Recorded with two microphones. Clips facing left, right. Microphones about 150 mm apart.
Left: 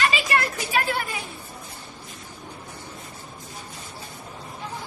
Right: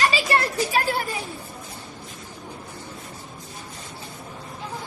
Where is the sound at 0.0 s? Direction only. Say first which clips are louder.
Right 2 dB; 35° right (ahead or behind).